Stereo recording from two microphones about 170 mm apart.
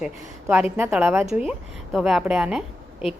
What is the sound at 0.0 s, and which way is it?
A woman's voice, 5° right (ahead or behind).